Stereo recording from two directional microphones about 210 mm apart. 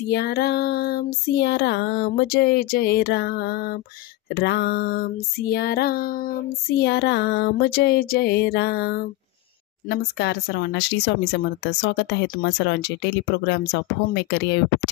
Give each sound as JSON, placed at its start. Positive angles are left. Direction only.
{"t": 0.0, "sound": "female singing", "side_deg": 50}